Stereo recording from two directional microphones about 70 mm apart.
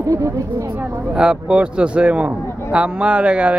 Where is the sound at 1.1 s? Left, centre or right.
Centre.